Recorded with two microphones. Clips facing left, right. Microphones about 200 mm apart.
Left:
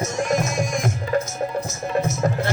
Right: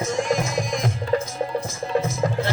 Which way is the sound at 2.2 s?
50° left (ahead or behind).